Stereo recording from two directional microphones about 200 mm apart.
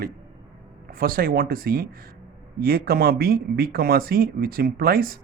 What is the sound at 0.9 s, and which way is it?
Speech, 45° right (ahead or behind).